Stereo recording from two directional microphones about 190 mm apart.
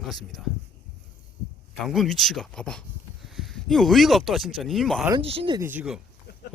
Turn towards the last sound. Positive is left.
turn(degrees=-5)  # may be behind; listen again after turning